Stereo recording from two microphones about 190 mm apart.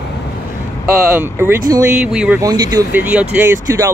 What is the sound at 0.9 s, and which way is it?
Speech, 10° right (ahead or behind).